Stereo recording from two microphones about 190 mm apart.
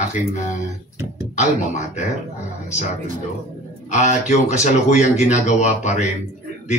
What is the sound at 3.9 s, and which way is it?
Speech, 40° left (ahead or behind).